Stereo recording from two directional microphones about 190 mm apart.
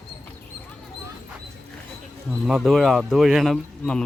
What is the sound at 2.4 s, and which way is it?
Speech, centre (ahead or behind).